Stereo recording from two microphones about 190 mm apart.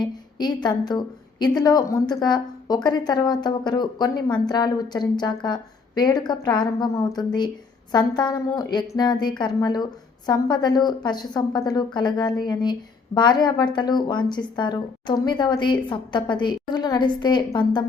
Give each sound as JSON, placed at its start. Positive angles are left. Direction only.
{"t": 0.0, "sound": "a woman's voice", "side_deg": 20}